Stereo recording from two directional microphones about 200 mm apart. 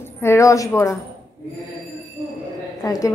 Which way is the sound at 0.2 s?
15° left (ahead or behind).